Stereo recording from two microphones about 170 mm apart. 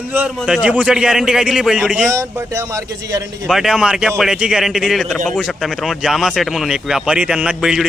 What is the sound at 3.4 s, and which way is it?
Speech, centre (ahead or behind).